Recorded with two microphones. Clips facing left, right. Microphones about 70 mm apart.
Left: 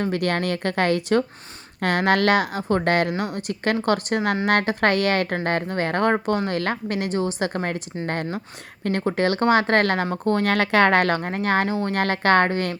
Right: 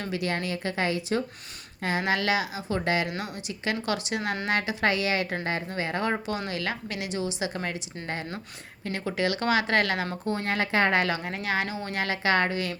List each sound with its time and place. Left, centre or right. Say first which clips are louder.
0.0 s a woman's voice: left 7 dB; left
10.2 s a woman's voice: left 8 dB; left
11.9 s a woman's voice: left 6 dB; left